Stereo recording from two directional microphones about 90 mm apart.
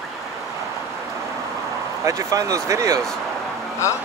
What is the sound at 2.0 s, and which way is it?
Speech, 35° right (ahead or behind).